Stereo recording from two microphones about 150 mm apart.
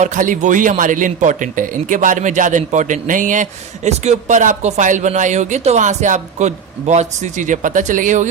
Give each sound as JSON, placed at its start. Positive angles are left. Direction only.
{"t": 0.0, "sound": "a man's voice", "side_deg": -55}